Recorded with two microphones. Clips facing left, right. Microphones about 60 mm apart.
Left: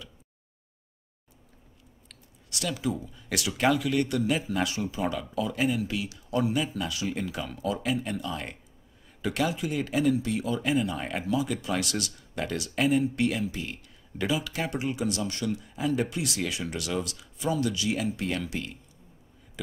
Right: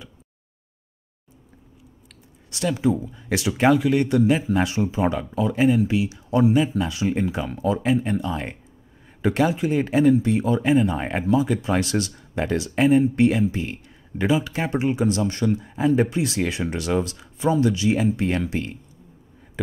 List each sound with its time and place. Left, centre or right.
2.5 s speech: right